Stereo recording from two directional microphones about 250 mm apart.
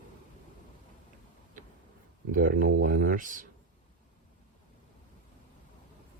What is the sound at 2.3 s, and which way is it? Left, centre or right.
Speech, right.